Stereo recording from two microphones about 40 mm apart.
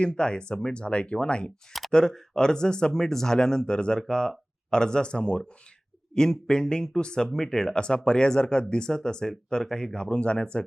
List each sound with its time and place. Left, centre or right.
0.0 s speech: left